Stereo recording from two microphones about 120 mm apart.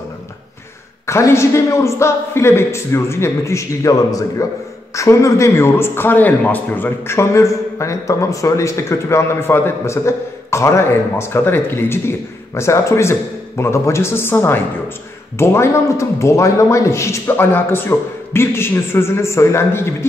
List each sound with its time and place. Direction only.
1.0 s a man's voice: 25° left (ahead or behind)